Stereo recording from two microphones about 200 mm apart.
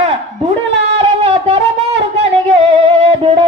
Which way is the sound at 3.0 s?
30° right (ahead or behind).